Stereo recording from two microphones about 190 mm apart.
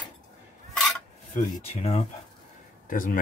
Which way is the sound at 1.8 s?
35° left (ahead or behind).